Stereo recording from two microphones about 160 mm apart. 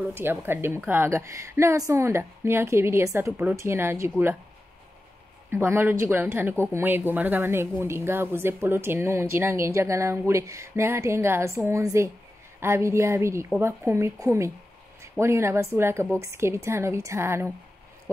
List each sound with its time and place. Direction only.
0.1 s speech: 15° right (ahead or behind)
5.5 s speech: 15° right (ahead or behind)